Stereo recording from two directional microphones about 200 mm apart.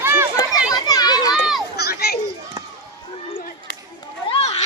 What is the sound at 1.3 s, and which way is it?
Run, centre (ahead or behind).